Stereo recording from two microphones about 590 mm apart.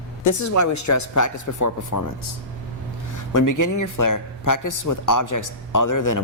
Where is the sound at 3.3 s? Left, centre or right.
Left.